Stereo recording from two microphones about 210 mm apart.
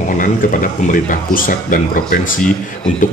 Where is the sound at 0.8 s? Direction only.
40° left (ahead or behind).